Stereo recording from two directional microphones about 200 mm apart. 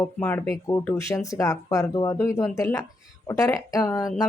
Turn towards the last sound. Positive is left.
turn(degrees=20)  # may be behind; listen again after turning